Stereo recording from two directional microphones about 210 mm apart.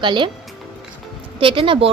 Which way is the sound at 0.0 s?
20° right (ahead or behind).